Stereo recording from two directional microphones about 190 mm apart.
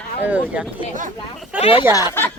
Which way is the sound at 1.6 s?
30° left (ahead or behind).